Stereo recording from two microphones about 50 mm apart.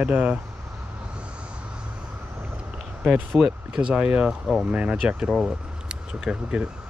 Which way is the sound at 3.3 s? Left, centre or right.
Centre.